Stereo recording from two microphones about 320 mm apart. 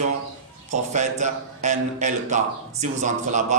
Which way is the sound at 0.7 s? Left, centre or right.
Right.